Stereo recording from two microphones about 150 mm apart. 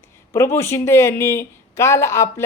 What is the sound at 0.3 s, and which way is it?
Speech, 15° left (ahead or behind).